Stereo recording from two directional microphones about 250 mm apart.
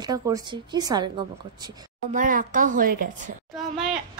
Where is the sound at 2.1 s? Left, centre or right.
Right.